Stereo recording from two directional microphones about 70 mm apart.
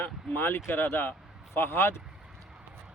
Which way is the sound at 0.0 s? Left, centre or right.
Left.